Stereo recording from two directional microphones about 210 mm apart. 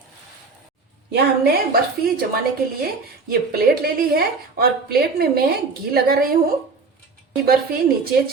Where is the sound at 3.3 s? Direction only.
45° right (ahead or behind).